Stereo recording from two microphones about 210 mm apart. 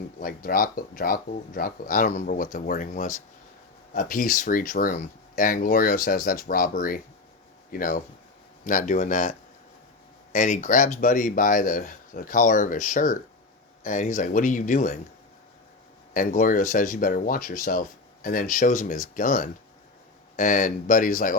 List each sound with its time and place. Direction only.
0.2 s speech: 45° left (ahead or behind)
10.3 s speech: 35° left (ahead or behind)
16.1 s speech: 40° left (ahead or behind)